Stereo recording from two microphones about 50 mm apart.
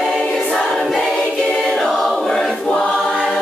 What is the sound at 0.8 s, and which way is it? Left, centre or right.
A capella, centre.